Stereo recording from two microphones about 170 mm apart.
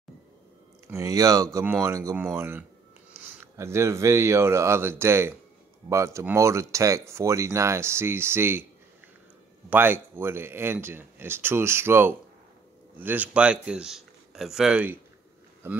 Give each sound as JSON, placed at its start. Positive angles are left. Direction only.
{"t": 0.8, "sound": "speech", "side_deg": -20}
{"t": 9.7, "sound": "speech", "side_deg": -10}